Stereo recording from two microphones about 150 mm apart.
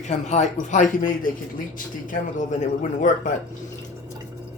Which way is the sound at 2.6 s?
55° left (ahead or behind).